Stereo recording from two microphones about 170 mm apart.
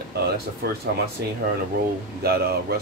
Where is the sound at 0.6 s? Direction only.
65° right (ahead or behind).